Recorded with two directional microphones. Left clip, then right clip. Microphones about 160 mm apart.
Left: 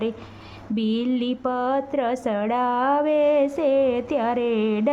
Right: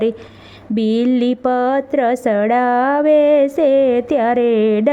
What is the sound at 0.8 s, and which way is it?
A woman's voice, 30° right (ahead or behind).